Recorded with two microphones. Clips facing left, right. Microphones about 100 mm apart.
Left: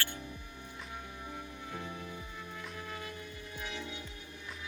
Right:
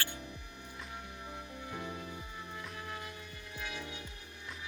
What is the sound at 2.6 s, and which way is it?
Music, 20° right (ahead or behind).